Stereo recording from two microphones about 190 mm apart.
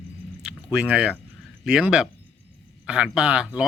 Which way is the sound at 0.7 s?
5° right (ahead or behind).